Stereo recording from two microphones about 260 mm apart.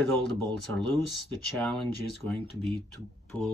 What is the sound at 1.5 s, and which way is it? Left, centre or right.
Speech, centre.